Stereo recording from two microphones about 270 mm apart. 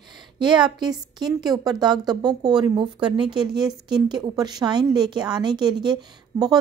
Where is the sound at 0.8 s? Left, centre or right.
Centre.